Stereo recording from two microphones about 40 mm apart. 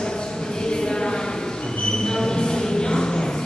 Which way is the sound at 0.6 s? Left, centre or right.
Centre.